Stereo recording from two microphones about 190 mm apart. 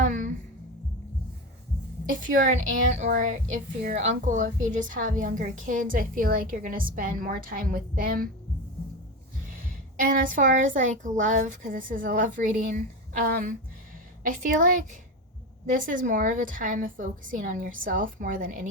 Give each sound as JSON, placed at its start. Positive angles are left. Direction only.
{"t": 0.0, "sound": "music", "side_deg": -40}
{"t": 2.0, "sound": "a woman's voice", "side_deg": -45}
{"t": 9.6, "sound": "a sound", "side_deg": -45}
{"t": 11.2, "sound": "a woman's voice", "side_deg": -40}